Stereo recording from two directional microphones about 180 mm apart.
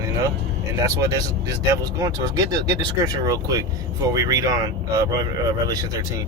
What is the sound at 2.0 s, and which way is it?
Speech, 20° right (ahead or behind).